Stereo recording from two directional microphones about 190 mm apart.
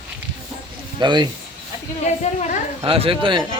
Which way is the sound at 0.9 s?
25° right (ahead or behind).